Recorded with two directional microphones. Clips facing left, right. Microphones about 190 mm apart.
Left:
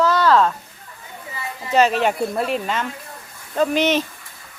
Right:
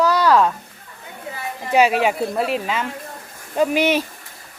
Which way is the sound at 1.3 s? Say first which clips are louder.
Right 3 dB; 55° right (ahead or behind).